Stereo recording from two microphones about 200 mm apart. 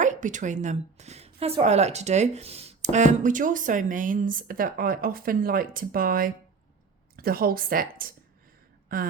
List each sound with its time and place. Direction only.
0.0 s a woman's voice: 40° right (ahead or behind)